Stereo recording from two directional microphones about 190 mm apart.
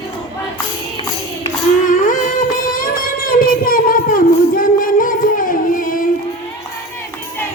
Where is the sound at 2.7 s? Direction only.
50° left (ahead or behind).